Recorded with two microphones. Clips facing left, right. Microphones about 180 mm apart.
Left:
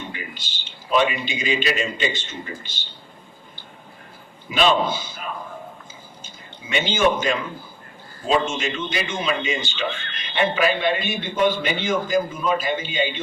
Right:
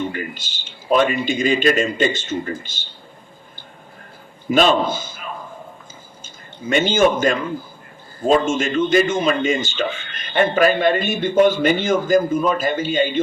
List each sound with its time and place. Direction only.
0.1 s a man's voice: 45° right (ahead or behind)
4.4 s a man's voice: 45° right (ahead or behind)
6.2 s a man's voice: 45° right (ahead or behind)